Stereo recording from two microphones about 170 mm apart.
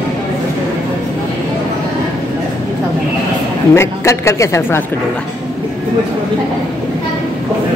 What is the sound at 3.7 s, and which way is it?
A woman's voice, 15° left (ahead or behind).